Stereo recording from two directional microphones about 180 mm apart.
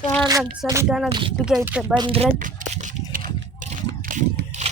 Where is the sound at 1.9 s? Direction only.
30° right (ahead or behind).